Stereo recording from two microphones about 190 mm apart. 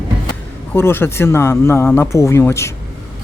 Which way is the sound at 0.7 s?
10° left (ahead or behind).